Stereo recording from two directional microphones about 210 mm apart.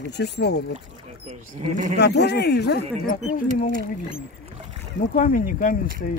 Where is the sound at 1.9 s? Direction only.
55° left (ahead or behind).